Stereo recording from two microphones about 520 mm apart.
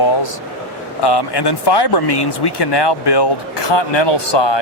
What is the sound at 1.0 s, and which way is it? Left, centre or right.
Speech, left.